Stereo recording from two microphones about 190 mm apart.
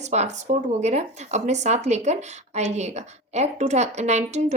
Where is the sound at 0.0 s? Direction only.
35° right (ahead or behind).